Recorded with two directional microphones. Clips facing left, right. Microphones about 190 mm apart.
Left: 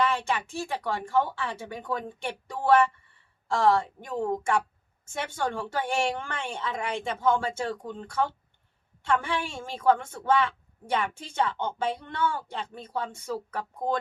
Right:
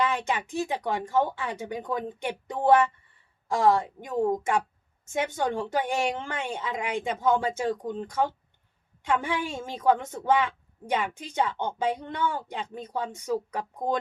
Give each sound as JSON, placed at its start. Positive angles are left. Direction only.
{"t": 0.1, "sound": "a woman's voice", "side_deg": -20}